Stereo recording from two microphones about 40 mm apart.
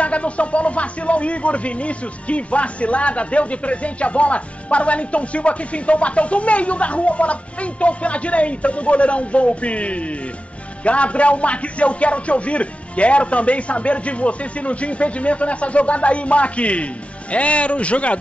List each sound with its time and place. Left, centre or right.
0.0 s speech: left